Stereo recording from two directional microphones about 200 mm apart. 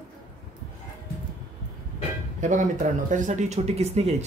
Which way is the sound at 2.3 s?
40° right (ahead or behind).